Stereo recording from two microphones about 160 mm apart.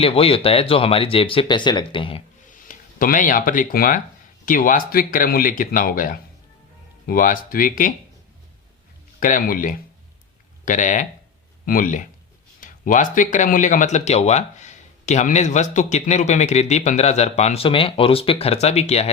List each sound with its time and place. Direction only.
0.0 s speech: 35° left (ahead or behind)
2.5 s speech: 55° left (ahead or behind)
9.2 s speech: 55° left (ahead or behind); by 19.1 s 40° left (ahead or behind)